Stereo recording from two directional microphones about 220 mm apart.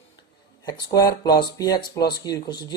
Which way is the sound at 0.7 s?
15° left (ahead or behind).